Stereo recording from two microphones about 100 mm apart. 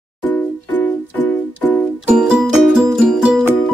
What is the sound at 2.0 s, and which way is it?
Music, 10° right (ahead or behind).